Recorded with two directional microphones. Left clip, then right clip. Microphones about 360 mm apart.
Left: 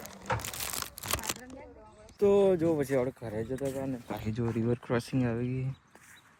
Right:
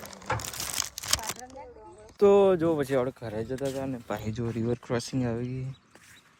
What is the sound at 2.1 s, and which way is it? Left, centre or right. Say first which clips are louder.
Speech: right 4 dB; centre.